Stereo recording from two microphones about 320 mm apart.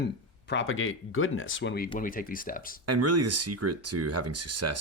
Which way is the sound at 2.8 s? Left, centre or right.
Right.